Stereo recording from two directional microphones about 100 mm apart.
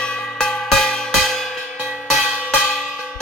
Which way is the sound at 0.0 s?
5° left (ahead or behind).